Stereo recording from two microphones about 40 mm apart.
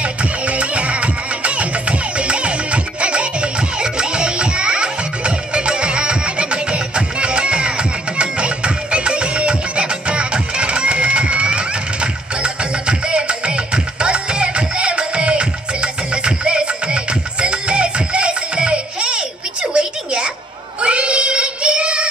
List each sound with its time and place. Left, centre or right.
0.0 s music: right
20.8 s child singing: right